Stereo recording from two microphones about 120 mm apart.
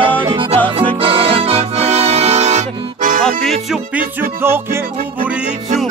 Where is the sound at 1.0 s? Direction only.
50° right (ahead or behind); by 3.2 s 90° right.